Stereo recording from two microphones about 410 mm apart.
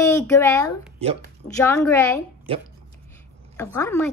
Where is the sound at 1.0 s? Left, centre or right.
Centre.